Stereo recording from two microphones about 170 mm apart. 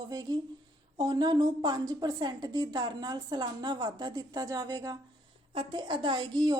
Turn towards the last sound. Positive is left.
turn(degrees=-25)  # may be behind; listen again after turning